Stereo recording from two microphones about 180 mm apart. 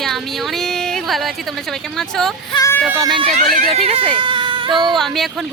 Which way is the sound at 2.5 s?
20° left (ahead or behind).